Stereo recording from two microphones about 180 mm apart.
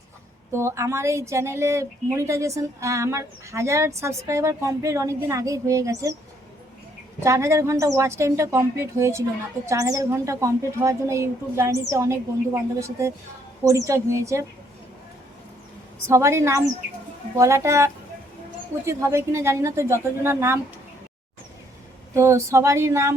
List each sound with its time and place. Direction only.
0.5 s speech: 15° right (ahead or behind)
7.2 s speech: 15° right (ahead or behind)
16.0 s speech: 15° right (ahead or behind)
22.1 s speech: 15° right (ahead or behind)